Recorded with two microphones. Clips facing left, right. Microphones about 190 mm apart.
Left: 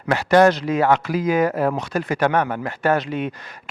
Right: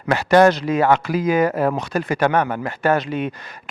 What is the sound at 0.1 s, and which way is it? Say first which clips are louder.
A man's voice: right 1 dB; 15° right (ahead or behind).